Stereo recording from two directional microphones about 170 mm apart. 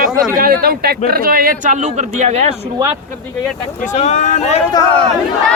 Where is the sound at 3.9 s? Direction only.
45° left (ahead or behind).